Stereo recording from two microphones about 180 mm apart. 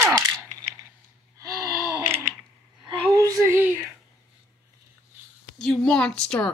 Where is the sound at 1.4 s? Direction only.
15° right (ahead or behind).